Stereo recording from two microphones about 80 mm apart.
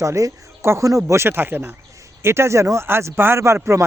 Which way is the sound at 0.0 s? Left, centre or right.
Right.